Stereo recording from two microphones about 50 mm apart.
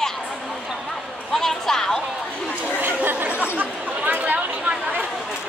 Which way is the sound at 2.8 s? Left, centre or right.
Right.